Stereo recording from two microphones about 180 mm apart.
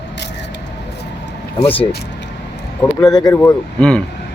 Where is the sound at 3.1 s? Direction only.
15° left (ahead or behind).